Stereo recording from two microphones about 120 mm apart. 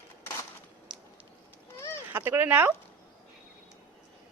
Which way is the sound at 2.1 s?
15° right (ahead or behind).